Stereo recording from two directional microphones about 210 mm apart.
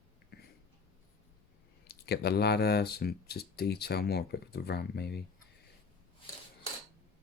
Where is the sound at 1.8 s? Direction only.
50° left (ahead or behind).